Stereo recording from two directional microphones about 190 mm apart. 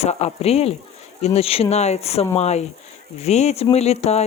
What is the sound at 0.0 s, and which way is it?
Speech, 35° left (ahead or behind).